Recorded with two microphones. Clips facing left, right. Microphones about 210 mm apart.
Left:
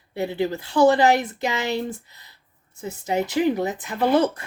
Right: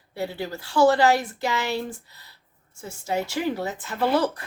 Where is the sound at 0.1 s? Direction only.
20° left (ahead or behind).